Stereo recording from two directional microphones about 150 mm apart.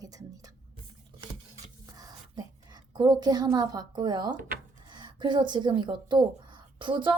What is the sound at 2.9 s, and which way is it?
A woman's voice, 30° right (ahead or behind).